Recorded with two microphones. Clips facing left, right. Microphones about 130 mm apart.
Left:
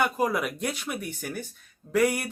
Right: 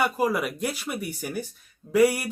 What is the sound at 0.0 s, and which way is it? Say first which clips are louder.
Speech: right 1 dB; 5° right (ahead or behind).